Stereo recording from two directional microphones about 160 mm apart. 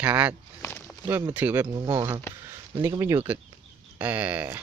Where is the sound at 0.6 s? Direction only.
15° left (ahead or behind).